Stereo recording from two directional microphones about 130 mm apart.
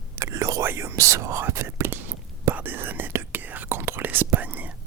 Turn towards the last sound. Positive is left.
turn(degrees=-10)  # may be behind; listen again after turning